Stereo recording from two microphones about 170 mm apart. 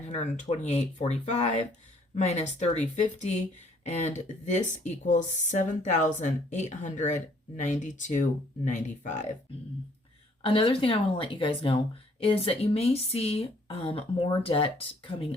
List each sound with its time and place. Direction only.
0.1 s speech: 40° left (ahead or behind)
10.4 s speech: 30° left (ahead or behind)